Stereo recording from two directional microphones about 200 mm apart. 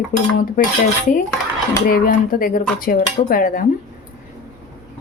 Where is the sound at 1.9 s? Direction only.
45° left (ahead or behind).